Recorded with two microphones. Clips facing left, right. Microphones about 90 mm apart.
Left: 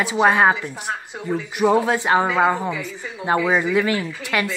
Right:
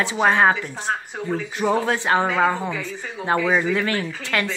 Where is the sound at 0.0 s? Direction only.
15° left (ahead or behind).